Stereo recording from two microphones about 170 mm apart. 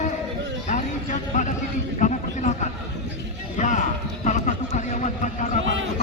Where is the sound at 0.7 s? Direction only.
45° left (ahead or behind).